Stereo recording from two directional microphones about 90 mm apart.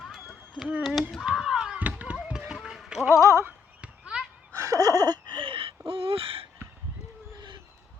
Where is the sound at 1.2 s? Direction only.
5° right (ahead or behind).